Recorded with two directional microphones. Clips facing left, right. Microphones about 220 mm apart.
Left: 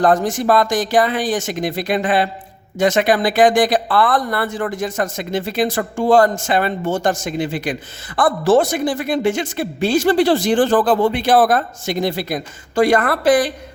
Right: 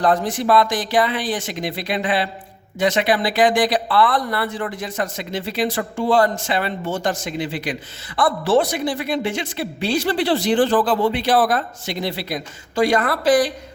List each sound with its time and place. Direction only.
0.0 s speech: 45° left (ahead or behind)